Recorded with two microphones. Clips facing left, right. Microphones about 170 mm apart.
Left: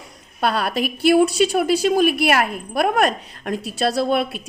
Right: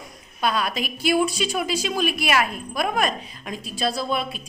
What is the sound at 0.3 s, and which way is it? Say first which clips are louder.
A woman's voice: left 3 dB; 60° left (ahead or behind).